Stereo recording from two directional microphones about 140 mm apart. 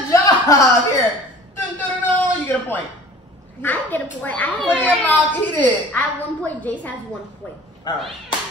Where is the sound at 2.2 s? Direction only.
10° left (ahead or behind).